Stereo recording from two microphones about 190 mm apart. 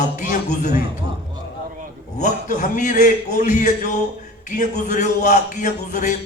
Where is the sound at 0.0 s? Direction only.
40° left (ahead or behind).